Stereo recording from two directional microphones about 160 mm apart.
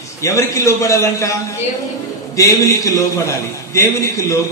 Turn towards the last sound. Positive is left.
turn(degrees=20)  # may be behind; listen again after turning